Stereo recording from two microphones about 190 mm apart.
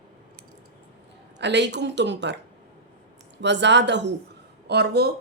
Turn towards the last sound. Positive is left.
turn(degrees=-60)  # may be behind; listen again after turning